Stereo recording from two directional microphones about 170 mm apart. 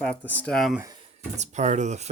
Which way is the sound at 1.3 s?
45° right (ahead or behind).